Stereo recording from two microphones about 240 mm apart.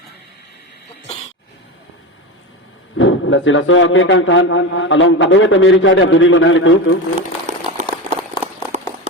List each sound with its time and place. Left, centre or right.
3.0 s a man's voice: left
7.2 s crumpling: right